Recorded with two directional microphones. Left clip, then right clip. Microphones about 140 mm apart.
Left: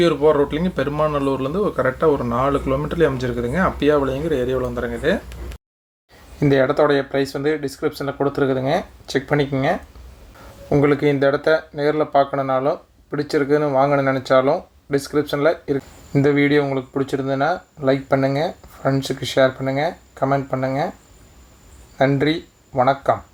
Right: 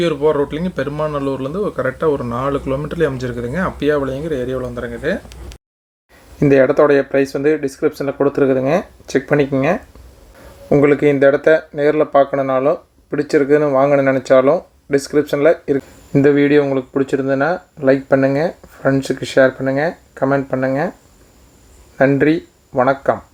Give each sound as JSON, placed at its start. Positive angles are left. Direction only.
{"t": 0.0, "sound": "speech", "side_deg": -20}
{"t": 6.4, "sound": "speech", "side_deg": -35}
{"t": 22.0, "sound": "speech", "side_deg": -35}